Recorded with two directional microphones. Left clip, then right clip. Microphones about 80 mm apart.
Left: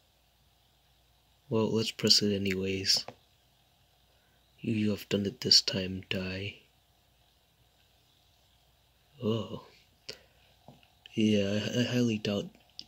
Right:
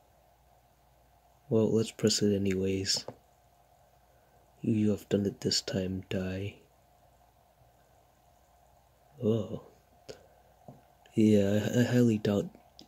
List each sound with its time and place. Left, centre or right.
1.5 s speech: centre
4.6 s speech: centre
9.2 s speech: centre
10.1 s a sound: centre
11.1 s speech: right